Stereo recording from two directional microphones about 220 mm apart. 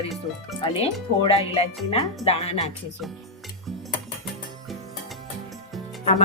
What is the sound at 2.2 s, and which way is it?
Speech, 30° left (ahead or behind).